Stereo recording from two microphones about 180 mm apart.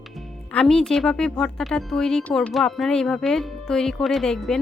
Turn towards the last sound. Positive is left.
turn(degrees=0)  # may be behind; listen again after turning